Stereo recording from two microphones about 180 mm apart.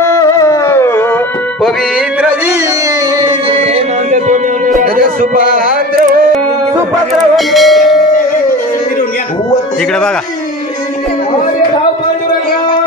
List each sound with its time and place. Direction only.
0.0 s carnatic music: 15° left (ahead or behind)
4.1 s music: 45° right (ahead or behind)
7.3 s church bell: centre (ahead or behind)